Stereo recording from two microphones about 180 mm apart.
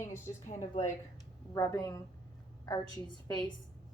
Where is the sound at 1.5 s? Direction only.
15° left (ahead or behind).